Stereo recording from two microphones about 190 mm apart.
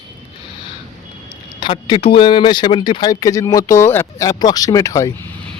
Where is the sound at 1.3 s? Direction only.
25° left (ahead or behind).